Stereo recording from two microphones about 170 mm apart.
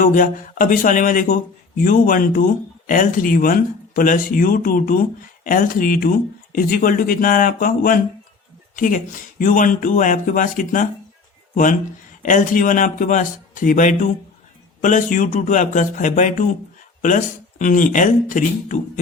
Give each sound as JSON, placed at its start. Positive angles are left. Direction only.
{"t": 0.0, "sound": "a man's voice", "side_deg": 50}